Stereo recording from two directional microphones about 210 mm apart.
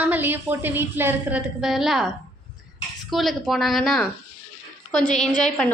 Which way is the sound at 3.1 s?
Centre (ahead or behind).